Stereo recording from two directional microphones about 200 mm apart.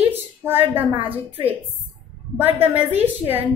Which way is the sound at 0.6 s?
10° right (ahead or behind).